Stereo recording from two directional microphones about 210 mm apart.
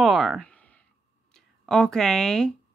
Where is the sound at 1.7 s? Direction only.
5° left (ahead or behind).